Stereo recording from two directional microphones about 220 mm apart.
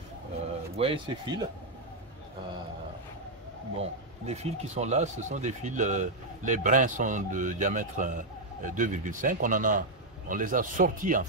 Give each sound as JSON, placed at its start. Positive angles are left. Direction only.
{"t": 0.7, "sound": "speech", "side_deg": -25}
{"t": 4.3, "sound": "speech", "side_deg": -30}